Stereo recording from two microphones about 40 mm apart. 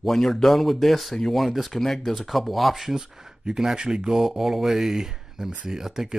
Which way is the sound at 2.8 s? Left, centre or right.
Centre.